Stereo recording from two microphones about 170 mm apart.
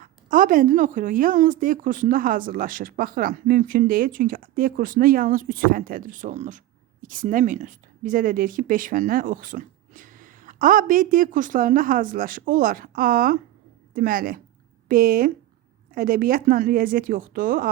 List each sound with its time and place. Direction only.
0.0 s a woman's voice: 55° right (ahead or behind)